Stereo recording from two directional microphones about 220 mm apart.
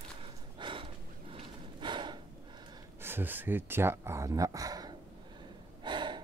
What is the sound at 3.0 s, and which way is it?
Speech, 10° right (ahead or behind).